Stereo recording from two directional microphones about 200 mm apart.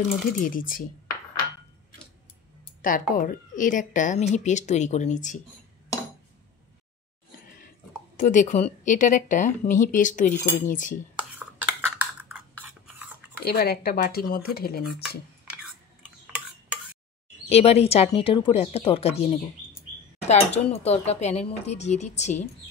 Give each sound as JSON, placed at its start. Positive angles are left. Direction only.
{"t": 0.1, "sound": "speech", "side_deg": 45}
{"t": 2.8, "sound": "speech", "side_deg": 40}
{"t": 8.2, "sound": "speech", "side_deg": 40}
{"t": 12.0, "sound": "a sound", "side_deg": -10}
{"t": 13.4, "sound": "speech", "side_deg": 50}
{"t": 16.3, "sound": "stir", "side_deg": -5}
{"t": 17.5, "sound": "speech", "side_deg": 30}